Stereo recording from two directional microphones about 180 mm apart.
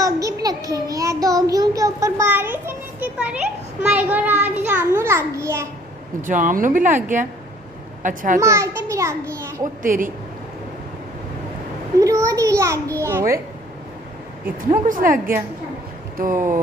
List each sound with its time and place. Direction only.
0.0 s child singing: 20° right (ahead or behind)
6.2 s speech: 45° right (ahead or behind)
8.0 s a child's voice: 50° right (ahead or behind)
8.4 s a child's voice: 15° right (ahead or behind)
9.8 s speech: 50° right (ahead or behind)
12.0 s a child's voice: 15° right (ahead or behind)
14.9 s speech: 50° right (ahead or behind)